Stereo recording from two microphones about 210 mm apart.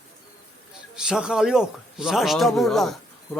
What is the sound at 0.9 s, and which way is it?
A man's voice, 5° right (ahead or behind).